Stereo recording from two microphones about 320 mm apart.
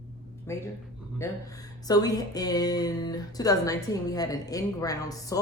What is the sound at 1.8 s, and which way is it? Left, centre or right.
Music, centre.